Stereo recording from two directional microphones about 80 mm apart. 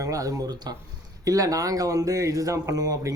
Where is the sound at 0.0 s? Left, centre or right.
Right.